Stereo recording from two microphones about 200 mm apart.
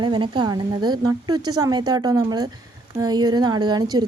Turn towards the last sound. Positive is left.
turn(degrees=-20)  # may be behind; listen again after turning